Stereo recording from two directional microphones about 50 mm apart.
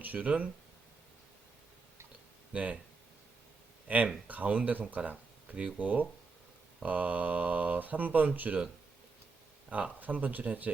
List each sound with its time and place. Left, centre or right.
0.0 s speech: right
2.5 s speech: right
3.8 s speech: right
9.6 s speech: right